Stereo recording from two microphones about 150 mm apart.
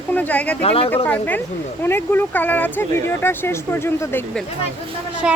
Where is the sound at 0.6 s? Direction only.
40° left (ahead or behind).